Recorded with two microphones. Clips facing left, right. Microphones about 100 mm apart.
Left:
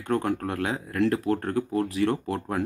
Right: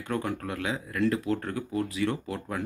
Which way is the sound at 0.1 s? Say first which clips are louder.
Left 5 dB; 50° left (ahead or behind).